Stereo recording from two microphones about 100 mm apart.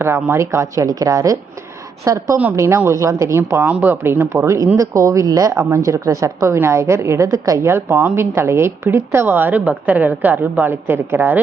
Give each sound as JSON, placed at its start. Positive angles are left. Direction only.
{"t": 0.0, "sound": "a woman's voice", "side_deg": -25}
{"t": 3.7, "sound": "a woman's voice", "side_deg": -15}